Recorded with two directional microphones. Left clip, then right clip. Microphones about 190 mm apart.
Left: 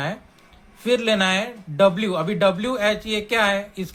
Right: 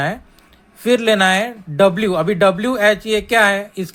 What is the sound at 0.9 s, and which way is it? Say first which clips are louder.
Speech: right 6 dB; 30° right (ahead or behind).